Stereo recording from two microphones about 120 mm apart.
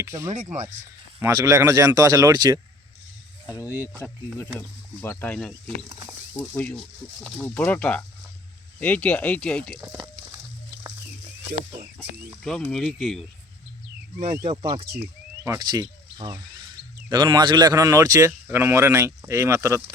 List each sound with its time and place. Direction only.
0.0 s speech: 25° right (ahead or behind)
4.9 s speech: 15° left (ahead or behind)
7.2 s speech: 5° right (ahead or behind)
7.4 s speech: 15° left (ahead or behind)
12.4 s speech: 5° left (ahead or behind)
14.4 s speech: 50° right (ahead or behind)
15.4 s speech: 35° right (ahead or behind)